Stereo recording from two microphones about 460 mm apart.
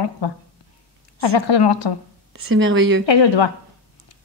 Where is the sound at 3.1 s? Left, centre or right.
Left.